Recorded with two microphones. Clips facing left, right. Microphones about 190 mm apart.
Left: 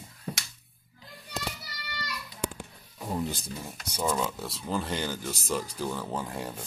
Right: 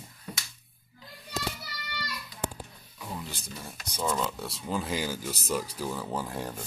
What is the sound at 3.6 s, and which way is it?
Speech, 10° left (ahead or behind).